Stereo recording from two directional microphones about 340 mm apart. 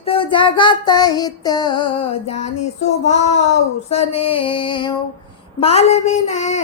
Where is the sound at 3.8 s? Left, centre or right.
Centre.